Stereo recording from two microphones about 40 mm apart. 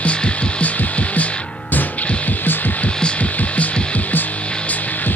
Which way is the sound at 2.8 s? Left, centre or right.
Left.